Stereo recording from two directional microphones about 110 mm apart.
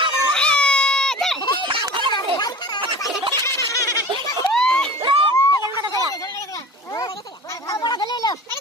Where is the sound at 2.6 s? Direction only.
40° left (ahead or behind).